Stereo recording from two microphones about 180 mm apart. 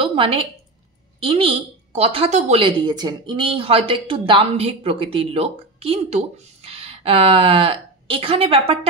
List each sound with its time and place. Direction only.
0.0 s a woman's voice: 30° right (ahead or behind)